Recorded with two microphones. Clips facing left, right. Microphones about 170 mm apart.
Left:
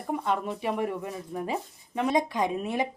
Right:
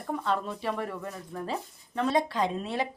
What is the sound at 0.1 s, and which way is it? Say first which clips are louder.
A woman's voice: left 1 dB; 15° left (ahead or behind).